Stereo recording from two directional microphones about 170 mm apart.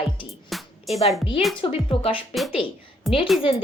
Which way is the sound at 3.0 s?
Centre (ahead or behind).